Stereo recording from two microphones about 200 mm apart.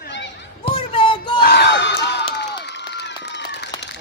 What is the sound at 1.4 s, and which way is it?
Crowd, 55° left (ahead or behind).